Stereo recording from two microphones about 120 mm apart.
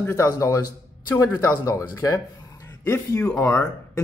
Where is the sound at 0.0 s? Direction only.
25° left (ahead or behind).